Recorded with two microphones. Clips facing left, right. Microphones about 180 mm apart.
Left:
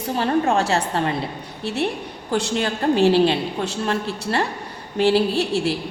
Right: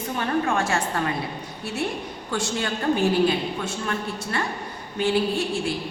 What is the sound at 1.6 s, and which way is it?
Speech, 65° left (ahead or behind).